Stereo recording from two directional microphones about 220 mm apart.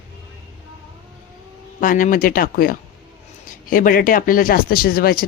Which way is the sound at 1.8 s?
35° left (ahead or behind).